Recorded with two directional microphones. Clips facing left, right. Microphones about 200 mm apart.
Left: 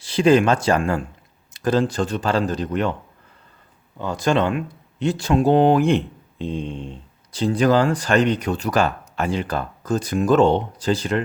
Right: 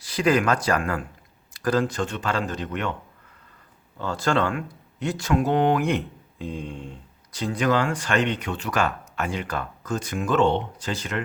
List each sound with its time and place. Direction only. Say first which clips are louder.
0.0 s speech: left 6 dB; 25° left (ahead or behind)
3.9 s speech: left 4 dB; 15° left (ahead or behind); by 11.2 s 35° left (ahead or behind)